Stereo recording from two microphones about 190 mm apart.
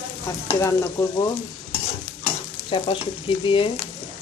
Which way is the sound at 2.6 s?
25° left (ahead or behind).